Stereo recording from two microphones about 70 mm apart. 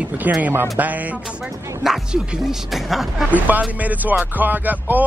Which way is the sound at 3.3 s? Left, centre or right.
Right.